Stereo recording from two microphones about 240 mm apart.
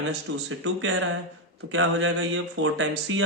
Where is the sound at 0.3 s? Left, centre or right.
Right.